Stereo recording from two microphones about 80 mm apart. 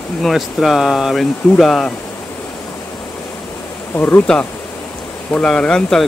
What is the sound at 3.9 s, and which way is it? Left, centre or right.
Speech, left.